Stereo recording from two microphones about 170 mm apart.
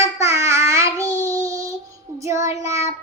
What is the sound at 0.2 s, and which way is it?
Child singing, 15° right (ahead or behind).